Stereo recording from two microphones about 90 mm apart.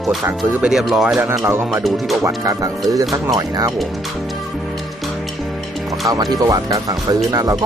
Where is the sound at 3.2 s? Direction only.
40° right (ahead or behind).